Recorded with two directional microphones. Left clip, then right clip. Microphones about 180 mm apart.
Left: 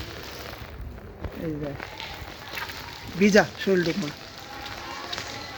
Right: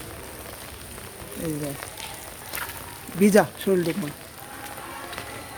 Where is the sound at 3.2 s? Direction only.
20° right (ahead or behind).